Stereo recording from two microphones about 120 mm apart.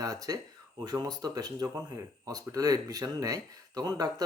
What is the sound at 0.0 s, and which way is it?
Speech, 30° right (ahead or behind).